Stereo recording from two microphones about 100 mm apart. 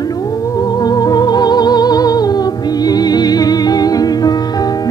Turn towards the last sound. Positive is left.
turn(degrees=40)  # may be behind; listen again after turning